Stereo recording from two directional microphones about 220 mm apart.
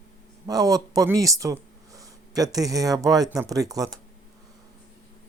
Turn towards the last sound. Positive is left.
turn(degrees=-15)  # may be behind; listen again after turning